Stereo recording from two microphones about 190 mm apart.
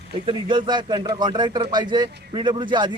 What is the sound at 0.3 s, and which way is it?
Speech, 25° right (ahead or behind).